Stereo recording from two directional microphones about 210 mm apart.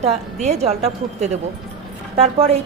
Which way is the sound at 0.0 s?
30° right (ahead or behind).